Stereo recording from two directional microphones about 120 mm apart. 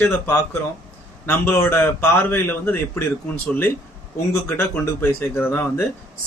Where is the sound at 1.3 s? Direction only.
20° left (ahead or behind).